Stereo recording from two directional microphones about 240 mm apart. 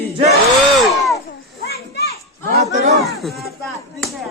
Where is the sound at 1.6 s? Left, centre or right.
Left.